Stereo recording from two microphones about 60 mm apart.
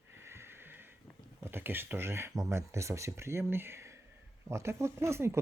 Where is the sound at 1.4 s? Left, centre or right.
Right.